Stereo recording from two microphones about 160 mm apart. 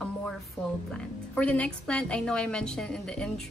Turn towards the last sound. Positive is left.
turn(degrees=5)  # may be behind; listen again after turning